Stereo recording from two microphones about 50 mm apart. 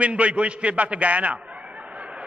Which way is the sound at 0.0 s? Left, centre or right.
Right.